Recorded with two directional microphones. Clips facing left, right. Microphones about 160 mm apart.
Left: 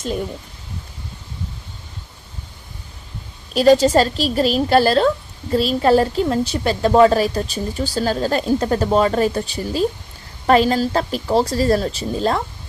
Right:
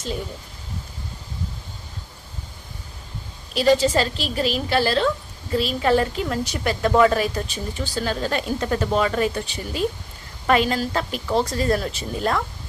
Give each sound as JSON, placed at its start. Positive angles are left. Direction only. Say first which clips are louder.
{"t": 3.5, "sound": "a woman's voice", "louder": "left 5 dB", "side_deg": 45}